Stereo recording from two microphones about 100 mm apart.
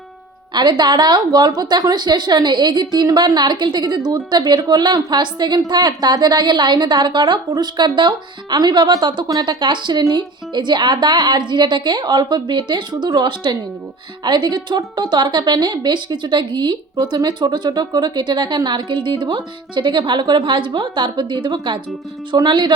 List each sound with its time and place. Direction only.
0.5 s a woman's voice: 45° right (ahead or behind)